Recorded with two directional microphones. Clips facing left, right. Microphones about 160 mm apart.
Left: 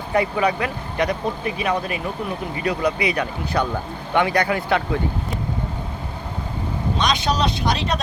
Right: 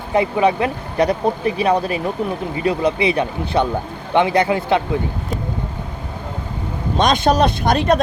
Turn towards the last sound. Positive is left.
turn(degrees=-50)  # may be behind; listen again after turning